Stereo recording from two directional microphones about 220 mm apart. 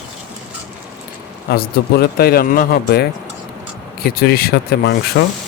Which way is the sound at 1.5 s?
45° left (ahead or behind).